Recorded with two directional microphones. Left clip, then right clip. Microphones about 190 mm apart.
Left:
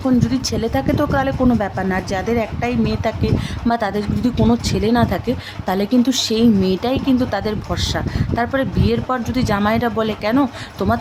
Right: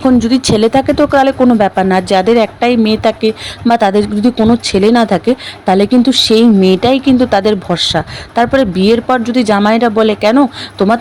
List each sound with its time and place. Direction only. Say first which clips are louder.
0.0 s speech: right 8 dB; 40° right (ahead or behind)